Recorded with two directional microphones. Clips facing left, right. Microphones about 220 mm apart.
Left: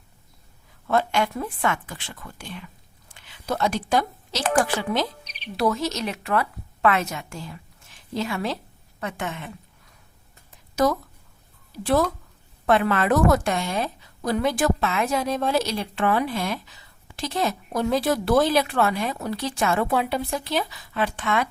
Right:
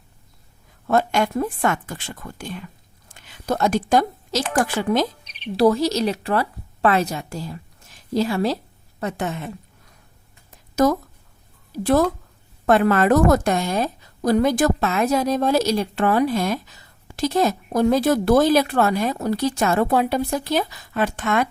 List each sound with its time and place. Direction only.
0.9 s a woman's voice: 45° right (ahead or behind)
5.5 s a woman's voice: 35° right (ahead or behind)
11.7 s a woman's voice: 45° right (ahead or behind)